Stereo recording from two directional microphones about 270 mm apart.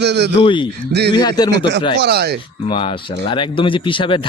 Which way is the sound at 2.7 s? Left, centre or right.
Centre.